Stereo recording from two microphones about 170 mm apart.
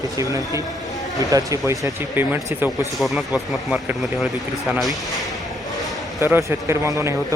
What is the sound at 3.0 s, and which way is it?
Speech, centre (ahead or behind).